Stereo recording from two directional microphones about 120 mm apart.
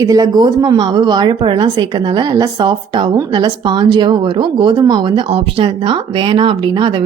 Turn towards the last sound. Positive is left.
turn(degrees=-40)  # may be behind; listen again after turning